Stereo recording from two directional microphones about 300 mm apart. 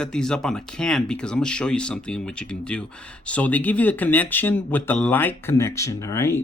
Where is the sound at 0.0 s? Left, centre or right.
Centre.